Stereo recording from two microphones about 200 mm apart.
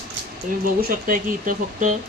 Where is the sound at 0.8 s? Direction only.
45° right (ahead or behind).